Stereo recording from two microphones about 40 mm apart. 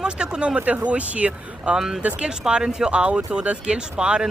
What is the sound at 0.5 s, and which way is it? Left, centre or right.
Speech, right.